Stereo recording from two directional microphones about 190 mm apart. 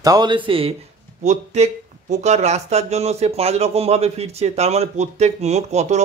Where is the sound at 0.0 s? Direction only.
20° right (ahead or behind).